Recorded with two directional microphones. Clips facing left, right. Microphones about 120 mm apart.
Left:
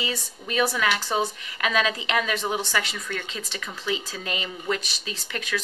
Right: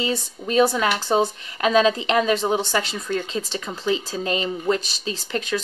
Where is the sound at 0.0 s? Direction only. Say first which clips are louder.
Right 6 dB; 30° right (ahead or behind).